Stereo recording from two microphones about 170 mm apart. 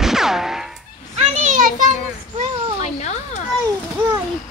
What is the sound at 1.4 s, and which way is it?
Children playing, 50° right (ahead or behind).